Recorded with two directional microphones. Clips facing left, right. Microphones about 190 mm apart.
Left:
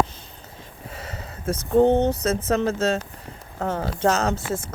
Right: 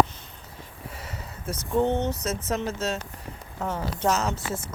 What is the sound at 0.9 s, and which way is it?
Speech, 25° left (ahead or behind).